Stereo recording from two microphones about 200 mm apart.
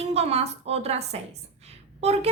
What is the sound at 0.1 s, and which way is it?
A woman's voice, 30° right (ahead or behind).